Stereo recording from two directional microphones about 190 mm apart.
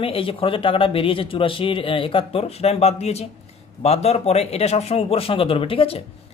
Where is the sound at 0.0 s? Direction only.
30° left (ahead or behind).